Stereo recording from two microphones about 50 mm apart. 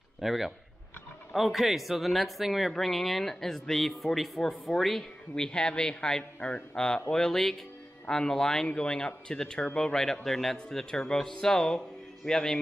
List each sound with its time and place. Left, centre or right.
0.2 s a man's voice: centre